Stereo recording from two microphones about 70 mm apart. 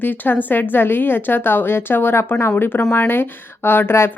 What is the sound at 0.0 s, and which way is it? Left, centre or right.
Speech, left.